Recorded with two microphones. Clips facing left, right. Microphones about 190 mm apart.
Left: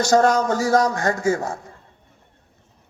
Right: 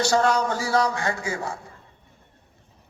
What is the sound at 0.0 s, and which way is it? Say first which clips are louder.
A man's voice: left 4 dB; 45° left (ahead or behind).